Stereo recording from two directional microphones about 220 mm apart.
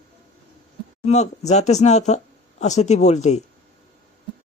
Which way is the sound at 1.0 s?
30° left (ahead or behind).